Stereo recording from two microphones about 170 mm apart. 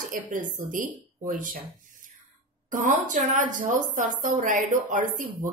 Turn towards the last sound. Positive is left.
turn(degrees=-50)  # may be behind; listen again after turning